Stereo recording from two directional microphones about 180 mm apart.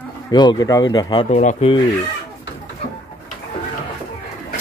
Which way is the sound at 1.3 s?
40° left (ahead or behind).